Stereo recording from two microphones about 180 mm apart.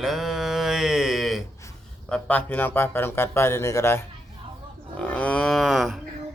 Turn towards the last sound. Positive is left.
turn(degrees=0)  # may be behind; listen again after turning